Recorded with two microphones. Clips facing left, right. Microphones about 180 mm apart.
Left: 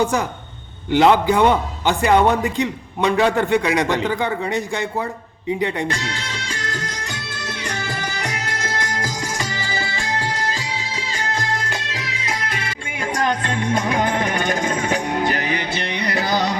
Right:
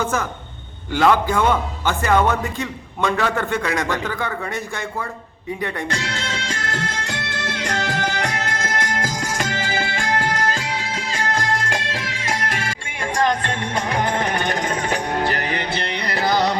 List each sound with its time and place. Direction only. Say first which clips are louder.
0.0 s a man's voice: left 3 dB; 15° left (ahead or behind)
5.9 s music: right 1 dB; 65° right (ahead or behind)